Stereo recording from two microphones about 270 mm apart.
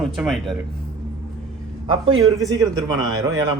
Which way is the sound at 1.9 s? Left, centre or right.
Centre.